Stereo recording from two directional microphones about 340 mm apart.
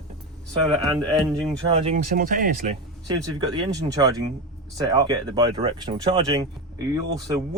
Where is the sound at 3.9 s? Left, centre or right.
Centre.